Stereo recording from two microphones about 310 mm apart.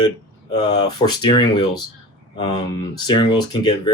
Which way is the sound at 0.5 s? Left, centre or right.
Centre.